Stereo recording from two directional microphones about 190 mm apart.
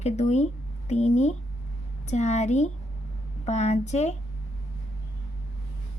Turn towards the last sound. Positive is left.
turn(degrees=35)  # may be behind; listen again after turning